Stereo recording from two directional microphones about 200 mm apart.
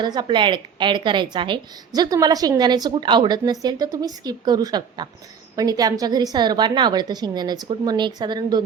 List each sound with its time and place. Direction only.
0.0 s a woman's voice: 20° right (ahead or behind)